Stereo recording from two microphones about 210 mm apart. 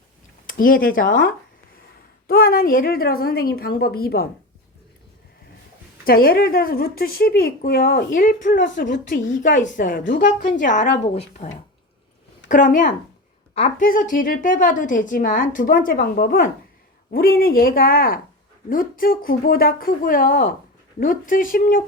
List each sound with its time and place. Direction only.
0.4 s speech: 40° left (ahead or behind)
6.1 s a woman's voice: 45° left (ahead or behind)
12.5 s a woman's voice: 40° left (ahead or behind)